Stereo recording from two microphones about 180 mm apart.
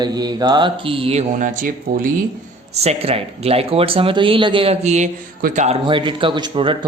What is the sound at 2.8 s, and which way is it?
Speech, 35° right (ahead or behind).